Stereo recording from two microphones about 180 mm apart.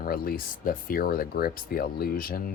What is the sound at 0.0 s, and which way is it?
Speech, 55° left (ahead or behind).